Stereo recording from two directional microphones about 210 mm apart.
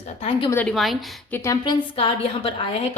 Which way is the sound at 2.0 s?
25° left (ahead or behind).